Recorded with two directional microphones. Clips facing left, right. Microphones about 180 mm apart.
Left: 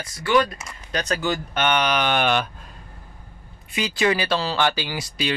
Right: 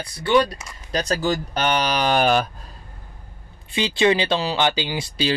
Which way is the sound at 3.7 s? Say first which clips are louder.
Right 3 dB; 25° right (ahead or behind).